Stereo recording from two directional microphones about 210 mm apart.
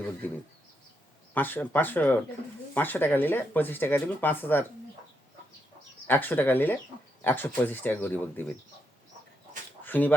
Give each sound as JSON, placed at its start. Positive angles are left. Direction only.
{"t": 0.2, "sound": "speech", "side_deg": 10}
{"t": 6.1, "sound": "speech", "side_deg": 10}
{"t": 9.8, "sound": "speech", "side_deg": 10}